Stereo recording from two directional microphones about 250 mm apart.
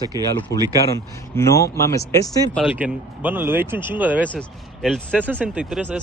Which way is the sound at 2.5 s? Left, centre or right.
Centre.